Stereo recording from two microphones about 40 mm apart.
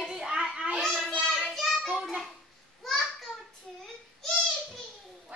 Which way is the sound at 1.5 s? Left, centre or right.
Centre.